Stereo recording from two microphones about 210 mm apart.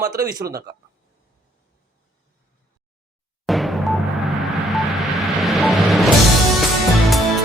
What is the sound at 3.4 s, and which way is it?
Music, centre (ahead or behind).